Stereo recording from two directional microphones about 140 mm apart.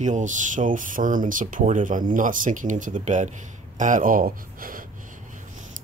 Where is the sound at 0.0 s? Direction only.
60° right (ahead or behind); by 4.8 s 80° right.